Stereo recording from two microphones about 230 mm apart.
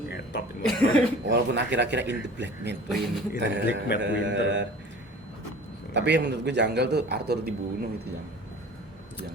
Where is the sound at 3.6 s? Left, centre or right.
Left.